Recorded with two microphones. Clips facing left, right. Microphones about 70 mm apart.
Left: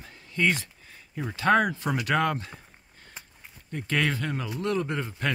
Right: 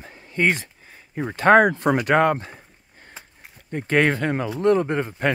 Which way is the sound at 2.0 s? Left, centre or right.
Right.